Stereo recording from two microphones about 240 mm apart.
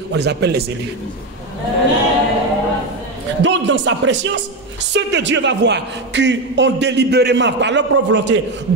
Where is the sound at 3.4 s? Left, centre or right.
Right.